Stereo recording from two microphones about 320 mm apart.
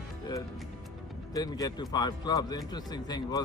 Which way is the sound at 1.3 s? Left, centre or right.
Centre.